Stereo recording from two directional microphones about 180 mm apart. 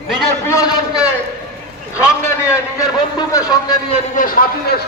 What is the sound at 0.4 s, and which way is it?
Speech, 20° left (ahead or behind).